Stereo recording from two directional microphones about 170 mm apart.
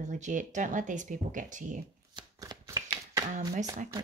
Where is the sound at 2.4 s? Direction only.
20° right (ahead or behind).